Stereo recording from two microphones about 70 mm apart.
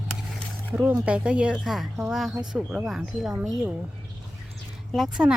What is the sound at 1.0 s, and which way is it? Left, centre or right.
Speech, centre.